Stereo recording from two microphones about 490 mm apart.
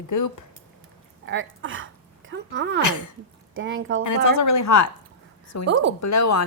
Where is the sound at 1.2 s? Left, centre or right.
Right.